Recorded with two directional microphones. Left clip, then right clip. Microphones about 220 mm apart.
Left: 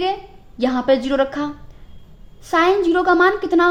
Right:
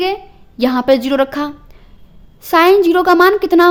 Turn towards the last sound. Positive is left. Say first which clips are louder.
# right 5 dB
turn(degrees=-35)  # may be behind; listen again after turning